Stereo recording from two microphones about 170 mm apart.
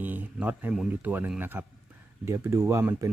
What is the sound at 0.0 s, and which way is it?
Speech, 10° right (ahead or behind).